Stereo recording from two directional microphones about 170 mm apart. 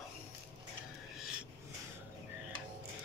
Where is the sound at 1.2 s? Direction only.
5° right (ahead or behind).